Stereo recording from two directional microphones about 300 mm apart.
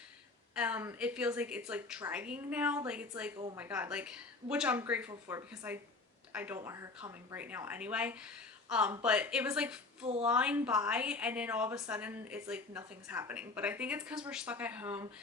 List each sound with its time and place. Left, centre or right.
0.5 s a woman's voice: centre
3.3 s speech: centre
3.6 s a woman's voice: centre